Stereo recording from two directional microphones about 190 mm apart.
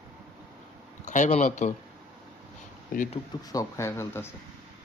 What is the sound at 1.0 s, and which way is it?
Speech, 40° left (ahead or behind).